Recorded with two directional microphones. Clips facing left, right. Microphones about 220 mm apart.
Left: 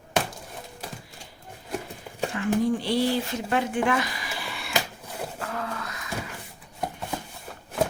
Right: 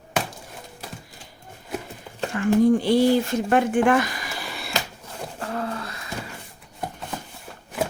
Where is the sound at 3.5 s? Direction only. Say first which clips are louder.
Right 6 dB; 50° right (ahead or behind).